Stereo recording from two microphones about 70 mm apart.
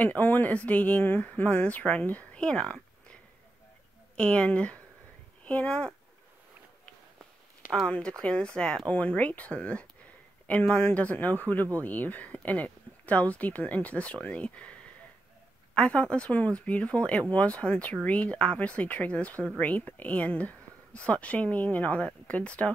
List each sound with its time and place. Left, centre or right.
0.0 s speech: left
4.2 s speech: centre
7.8 s speech: centre